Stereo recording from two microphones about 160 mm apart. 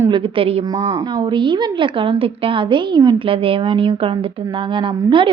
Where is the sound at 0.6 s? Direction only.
20° right (ahead or behind).